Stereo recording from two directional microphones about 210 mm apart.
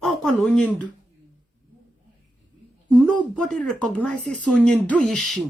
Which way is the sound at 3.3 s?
5° left (ahead or behind).